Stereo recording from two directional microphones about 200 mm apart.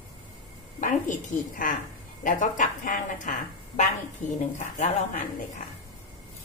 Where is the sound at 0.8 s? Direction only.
40° left (ahead or behind).